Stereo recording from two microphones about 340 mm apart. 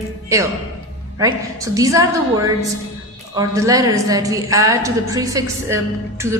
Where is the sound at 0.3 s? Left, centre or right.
Centre.